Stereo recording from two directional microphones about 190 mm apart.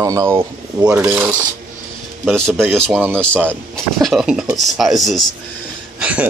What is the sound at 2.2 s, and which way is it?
Speech, centre (ahead or behind).